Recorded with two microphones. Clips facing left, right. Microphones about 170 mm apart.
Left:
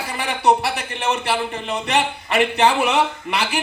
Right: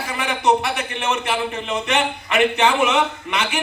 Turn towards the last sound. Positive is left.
turn(degrees=35)  # may be behind; listen again after turning